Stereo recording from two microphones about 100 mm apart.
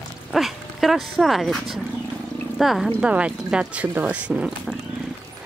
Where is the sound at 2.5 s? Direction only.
Centre (ahead or behind).